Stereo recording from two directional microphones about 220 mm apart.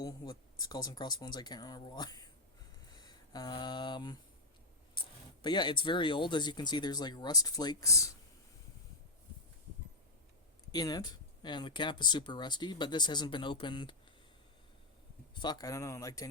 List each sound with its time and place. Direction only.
0.0 s speech: 15° left (ahead or behind)
10.7 s speech: 15° left (ahead or behind)
15.4 s speech: 20° left (ahead or behind)